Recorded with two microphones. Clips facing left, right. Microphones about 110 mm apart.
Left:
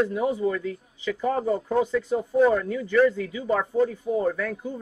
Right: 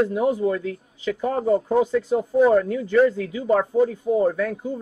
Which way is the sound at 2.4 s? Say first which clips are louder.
Right 4 dB; 25° right (ahead or behind).